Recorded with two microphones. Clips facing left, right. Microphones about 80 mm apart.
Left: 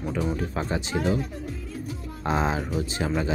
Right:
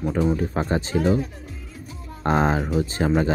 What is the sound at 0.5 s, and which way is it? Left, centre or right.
Speech, right.